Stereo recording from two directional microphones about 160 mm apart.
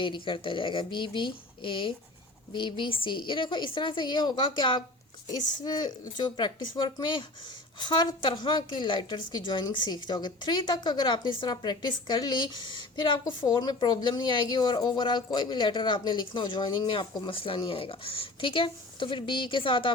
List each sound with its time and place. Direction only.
0.0 s a woman's voice: 30° left (ahead or behind)